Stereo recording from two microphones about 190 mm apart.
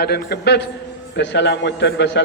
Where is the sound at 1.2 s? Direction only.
70° left (ahead or behind).